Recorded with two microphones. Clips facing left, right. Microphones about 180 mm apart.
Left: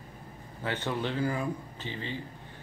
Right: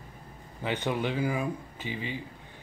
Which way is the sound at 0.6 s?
15° right (ahead or behind).